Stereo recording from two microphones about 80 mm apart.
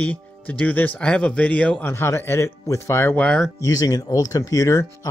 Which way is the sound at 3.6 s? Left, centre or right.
Left.